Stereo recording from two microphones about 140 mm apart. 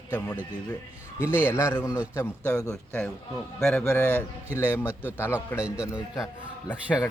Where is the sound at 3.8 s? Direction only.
15° left (ahead or behind).